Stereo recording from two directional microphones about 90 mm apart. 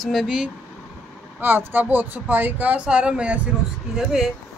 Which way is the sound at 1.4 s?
25° right (ahead or behind).